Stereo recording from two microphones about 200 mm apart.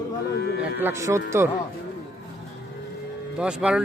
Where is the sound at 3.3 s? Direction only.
5° right (ahead or behind).